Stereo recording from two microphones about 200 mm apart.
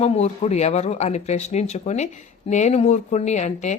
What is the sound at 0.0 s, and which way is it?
Speech, 30° left (ahead or behind).